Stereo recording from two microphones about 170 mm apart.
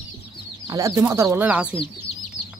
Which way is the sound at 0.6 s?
20° right (ahead or behind).